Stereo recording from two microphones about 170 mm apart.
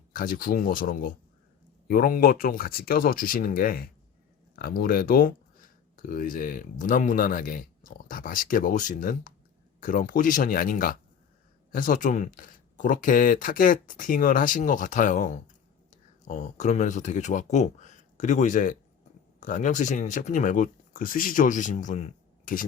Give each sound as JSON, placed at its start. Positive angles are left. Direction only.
{"t": 0.1, "sound": "speech", "side_deg": 55}